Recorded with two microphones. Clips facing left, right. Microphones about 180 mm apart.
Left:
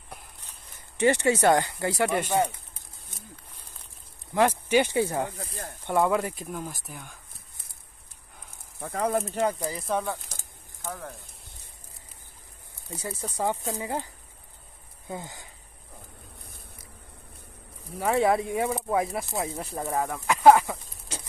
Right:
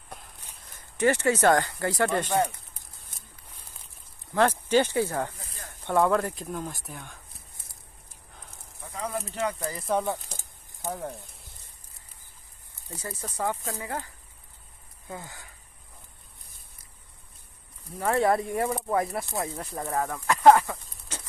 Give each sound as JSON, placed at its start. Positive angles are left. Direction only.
{"t": 1.0, "sound": "speech", "side_deg": 20}
{"t": 4.3, "sound": "speech", "side_deg": 10}
{"t": 8.7, "sound": "speech", "side_deg": 55}
{"t": 9.3, "sound": "speech", "side_deg": 35}
{"t": 10.0, "sound": "a sound", "side_deg": -20}
{"t": 12.9, "sound": "speech", "side_deg": 15}
{"t": 17.9, "sound": "speech", "side_deg": 0}